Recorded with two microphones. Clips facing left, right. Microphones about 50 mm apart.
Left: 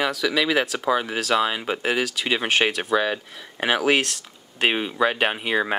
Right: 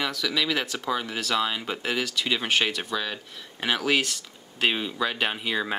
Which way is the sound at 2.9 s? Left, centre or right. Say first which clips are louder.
Left 8 dB; left.